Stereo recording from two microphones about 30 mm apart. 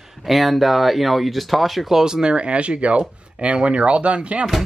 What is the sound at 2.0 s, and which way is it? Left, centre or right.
Speech, right.